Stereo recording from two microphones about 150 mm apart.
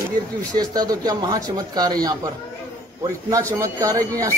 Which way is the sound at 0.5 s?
25° right (ahead or behind).